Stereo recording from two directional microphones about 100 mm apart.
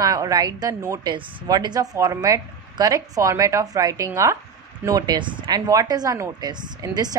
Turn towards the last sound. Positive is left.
turn(degrees=-40)  # may be behind; listen again after turning